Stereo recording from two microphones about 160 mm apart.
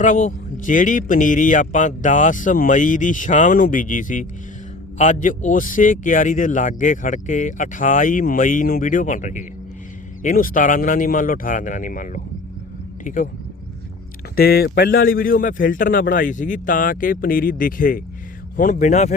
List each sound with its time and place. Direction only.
0.0 s a man's voice: 50° left (ahead or behind)
14.3 s a man's voice: 75° left (ahead or behind); by 19.1 s 45° left (ahead or behind)